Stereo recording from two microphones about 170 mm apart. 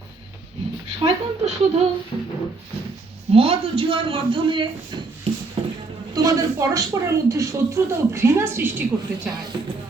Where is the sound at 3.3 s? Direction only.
35° right (ahead or behind).